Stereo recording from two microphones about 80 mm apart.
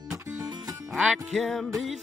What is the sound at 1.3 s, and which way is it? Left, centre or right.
Speech, centre.